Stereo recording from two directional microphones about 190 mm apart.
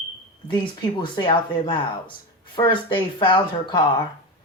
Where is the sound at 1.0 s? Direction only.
25° left (ahead or behind).